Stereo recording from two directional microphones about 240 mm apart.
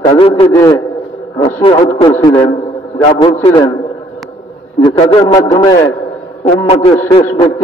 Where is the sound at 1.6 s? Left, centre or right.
Left.